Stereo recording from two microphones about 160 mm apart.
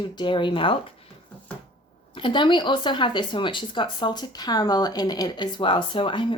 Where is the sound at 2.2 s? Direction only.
30° left (ahead or behind).